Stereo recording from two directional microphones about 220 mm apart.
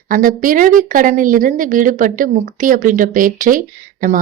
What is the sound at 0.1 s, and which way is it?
A woman's voice, 40° right (ahead or behind).